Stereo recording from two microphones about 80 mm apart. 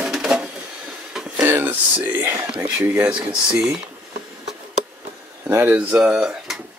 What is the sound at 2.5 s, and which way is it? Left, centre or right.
Speech, centre.